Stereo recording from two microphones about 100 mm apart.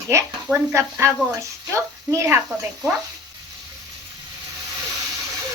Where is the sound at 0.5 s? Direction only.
25° right (ahead or behind).